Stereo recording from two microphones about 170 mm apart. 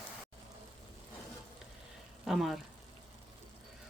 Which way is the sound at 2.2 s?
Centre (ahead or behind).